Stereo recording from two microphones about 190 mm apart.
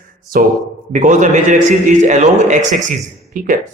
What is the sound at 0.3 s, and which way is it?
A man's voice, 50° right (ahead or behind).